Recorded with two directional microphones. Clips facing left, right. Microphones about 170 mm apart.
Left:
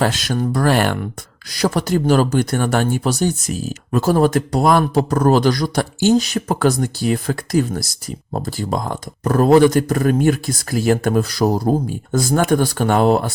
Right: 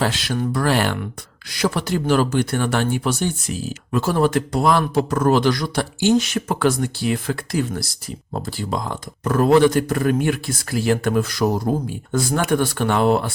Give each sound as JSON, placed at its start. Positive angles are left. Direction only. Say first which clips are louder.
{"t": 0.0, "sound": "speech", "louder": "left 3 dB", "side_deg": 45}
{"t": 1.5, "sound": "speech", "louder": "left 3 dB", "side_deg": 40}